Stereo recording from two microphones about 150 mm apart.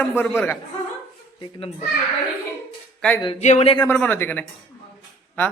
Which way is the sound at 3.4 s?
50° left (ahead or behind).